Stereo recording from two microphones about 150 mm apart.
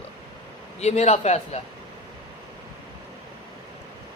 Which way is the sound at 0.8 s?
45° left (ahead or behind).